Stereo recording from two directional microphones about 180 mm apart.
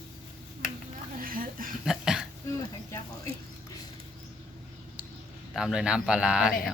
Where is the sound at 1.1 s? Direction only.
50° right (ahead or behind).